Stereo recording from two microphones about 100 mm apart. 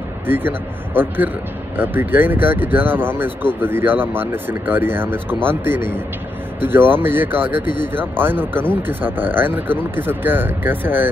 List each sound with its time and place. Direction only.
0.3 s speech: 20° right (ahead or behind)